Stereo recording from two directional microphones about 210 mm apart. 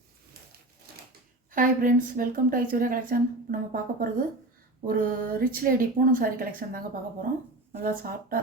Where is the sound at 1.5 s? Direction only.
40° right (ahead or behind).